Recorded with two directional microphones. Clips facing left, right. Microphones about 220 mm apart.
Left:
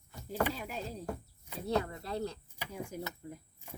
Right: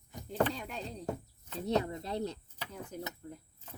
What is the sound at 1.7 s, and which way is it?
Speech, 20° right (ahead or behind).